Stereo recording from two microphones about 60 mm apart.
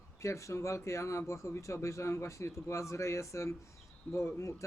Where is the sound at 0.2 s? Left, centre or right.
Left.